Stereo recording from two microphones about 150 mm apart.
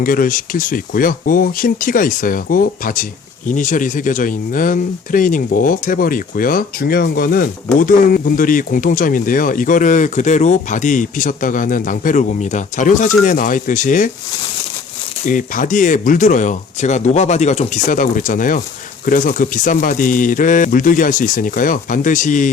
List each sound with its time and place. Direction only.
0.0 s speech: 70° left (ahead or behind)
15.3 s speech: 60° left (ahead or behind)